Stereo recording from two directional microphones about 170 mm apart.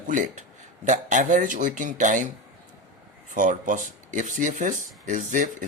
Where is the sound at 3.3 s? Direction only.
50° right (ahead or behind).